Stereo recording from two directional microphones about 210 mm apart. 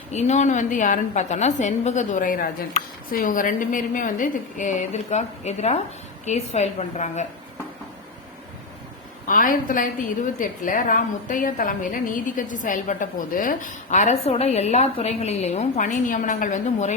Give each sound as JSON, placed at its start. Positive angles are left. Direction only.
{"t": 0.1, "sound": "a woman's voice", "side_deg": 35}
{"t": 9.2, "sound": "a woman's voice", "side_deg": 40}